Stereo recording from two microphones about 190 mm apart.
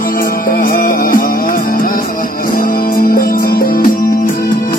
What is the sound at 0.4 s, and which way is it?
Music, 50° left (ahead or behind).